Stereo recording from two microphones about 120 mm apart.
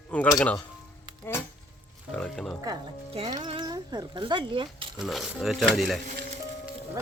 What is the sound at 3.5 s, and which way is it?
Speech, 40° right (ahead or behind).